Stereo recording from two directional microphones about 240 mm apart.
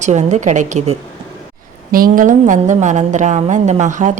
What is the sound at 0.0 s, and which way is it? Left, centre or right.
A woman's voice, right.